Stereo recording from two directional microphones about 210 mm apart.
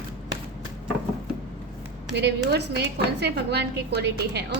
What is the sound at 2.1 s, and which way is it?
A woman's voice, 55° right (ahead or behind).